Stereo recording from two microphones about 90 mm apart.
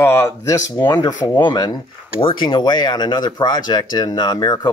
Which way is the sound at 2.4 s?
55° left (ahead or behind).